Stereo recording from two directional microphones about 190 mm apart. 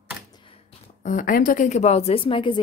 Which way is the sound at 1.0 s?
45° left (ahead or behind).